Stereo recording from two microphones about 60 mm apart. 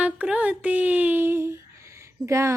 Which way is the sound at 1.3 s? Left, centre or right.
Right.